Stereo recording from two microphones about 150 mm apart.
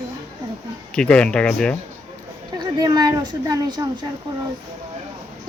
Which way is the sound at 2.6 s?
25° right (ahead or behind).